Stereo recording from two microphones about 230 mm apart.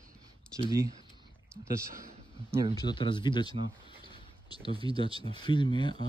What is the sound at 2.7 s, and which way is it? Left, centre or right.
Speech, centre.